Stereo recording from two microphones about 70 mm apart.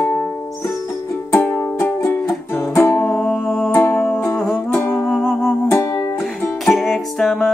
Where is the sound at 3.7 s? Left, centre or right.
Left.